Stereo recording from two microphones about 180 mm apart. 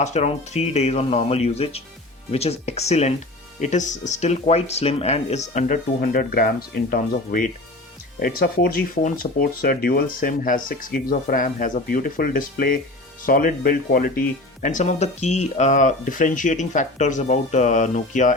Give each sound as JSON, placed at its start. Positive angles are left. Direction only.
{"t": 0.0, "sound": "speech", "side_deg": 40}